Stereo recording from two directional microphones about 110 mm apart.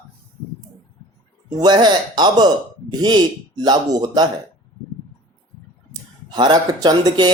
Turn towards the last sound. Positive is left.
turn(degrees=-40)  # may be behind; listen again after turning